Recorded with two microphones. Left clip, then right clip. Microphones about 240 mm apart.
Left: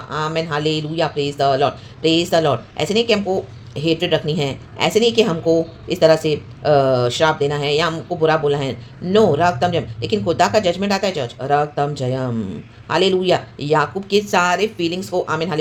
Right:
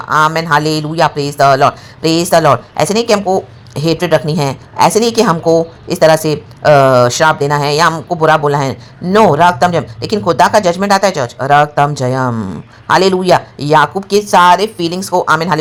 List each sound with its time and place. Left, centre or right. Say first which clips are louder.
0.1 s a woman's voice: right 11 dB; right